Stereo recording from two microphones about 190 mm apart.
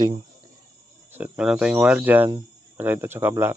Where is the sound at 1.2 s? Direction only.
5° right (ahead or behind).